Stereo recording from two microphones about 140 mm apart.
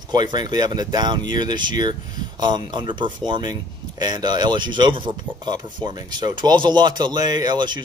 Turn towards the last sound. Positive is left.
turn(degrees=-30)  # may be behind; listen again after turning